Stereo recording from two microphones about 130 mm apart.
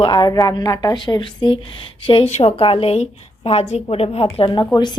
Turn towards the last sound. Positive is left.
turn(degrees=35)  # may be behind; listen again after turning